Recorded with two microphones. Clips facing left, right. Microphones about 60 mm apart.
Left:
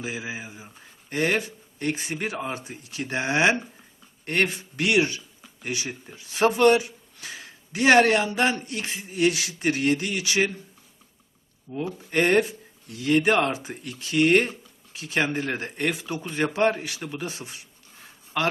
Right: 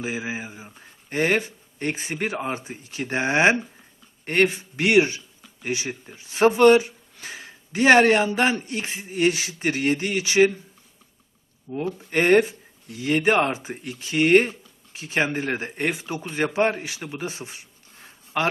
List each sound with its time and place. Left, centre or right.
0.0 s speech: right
11.7 s speech: centre
12.1 s speech: right